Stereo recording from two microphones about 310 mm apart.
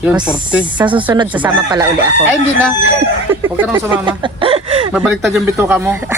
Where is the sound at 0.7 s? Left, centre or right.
Centre.